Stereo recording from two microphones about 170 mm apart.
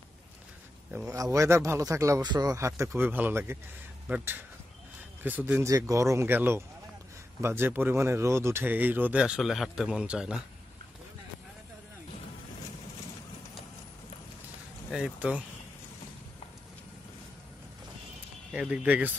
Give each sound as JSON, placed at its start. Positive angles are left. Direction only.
{"t": 1.0, "sound": "speech", "side_deg": -20}
{"t": 14.9, "sound": "speech", "side_deg": -5}
{"t": 18.5, "sound": "speech", "side_deg": -5}